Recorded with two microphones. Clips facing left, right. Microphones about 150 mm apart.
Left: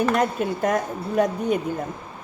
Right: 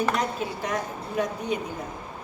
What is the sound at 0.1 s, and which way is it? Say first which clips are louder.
A woman's voice: left 5 dB; 55° left (ahead or behind).